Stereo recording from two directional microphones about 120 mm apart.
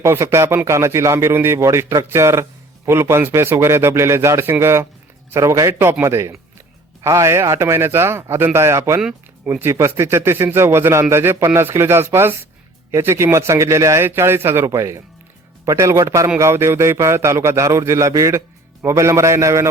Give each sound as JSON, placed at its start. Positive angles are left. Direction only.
{"t": 0.0, "sound": "a man's voice", "side_deg": -20}